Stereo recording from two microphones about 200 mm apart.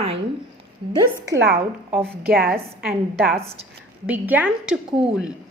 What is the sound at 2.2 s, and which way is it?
A woman's voice, 50° right (ahead or behind).